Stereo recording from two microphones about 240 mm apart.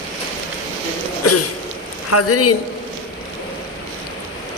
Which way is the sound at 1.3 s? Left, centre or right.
Left.